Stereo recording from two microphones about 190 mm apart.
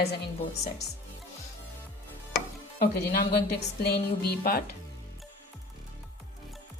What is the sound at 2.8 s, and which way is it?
A woman's voice, 55° left (ahead or behind).